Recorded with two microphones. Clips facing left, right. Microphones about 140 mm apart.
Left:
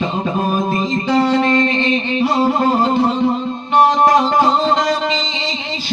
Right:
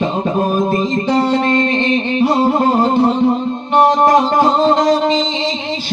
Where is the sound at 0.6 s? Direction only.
50° right (ahead or behind).